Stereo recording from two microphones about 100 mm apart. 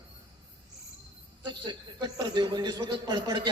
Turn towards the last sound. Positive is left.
turn(degrees=-50)  # may be behind; listen again after turning